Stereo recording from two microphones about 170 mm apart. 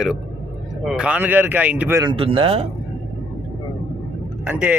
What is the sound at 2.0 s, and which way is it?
Speech, 30° right (ahead or behind).